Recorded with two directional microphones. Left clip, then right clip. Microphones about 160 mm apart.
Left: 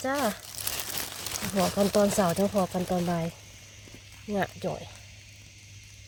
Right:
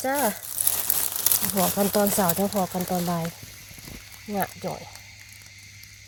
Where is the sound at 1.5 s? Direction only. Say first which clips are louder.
Right 1 dB; 25° right (ahead or behind).